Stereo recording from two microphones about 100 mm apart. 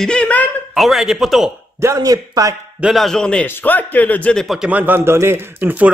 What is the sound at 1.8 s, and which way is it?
Speech, 30° right (ahead or behind).